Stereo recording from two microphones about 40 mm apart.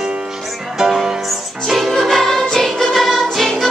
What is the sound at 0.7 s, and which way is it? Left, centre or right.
Music, centre.